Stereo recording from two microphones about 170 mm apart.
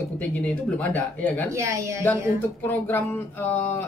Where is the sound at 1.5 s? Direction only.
15° right (ahead or behind).